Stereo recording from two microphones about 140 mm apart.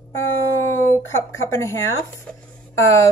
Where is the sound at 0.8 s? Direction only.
20° left (ahead or behind).